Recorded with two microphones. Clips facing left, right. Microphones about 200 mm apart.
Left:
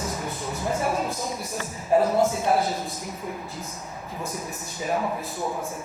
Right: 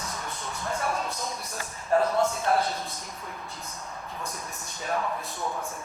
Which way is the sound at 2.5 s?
5° left (ahead or behind).